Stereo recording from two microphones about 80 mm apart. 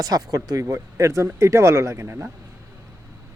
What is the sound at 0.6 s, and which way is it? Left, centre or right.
Speech, right.